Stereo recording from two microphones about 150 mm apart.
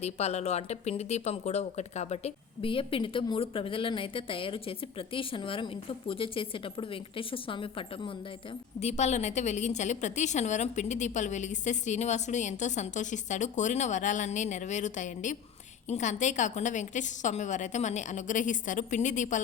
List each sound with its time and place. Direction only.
0.0 s speech: 45° left (ahead or behind)
8.8 s a woman's voice: 50° left (ahead or behind)